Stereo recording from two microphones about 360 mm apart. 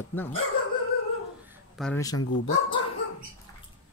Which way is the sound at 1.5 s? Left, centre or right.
Centre.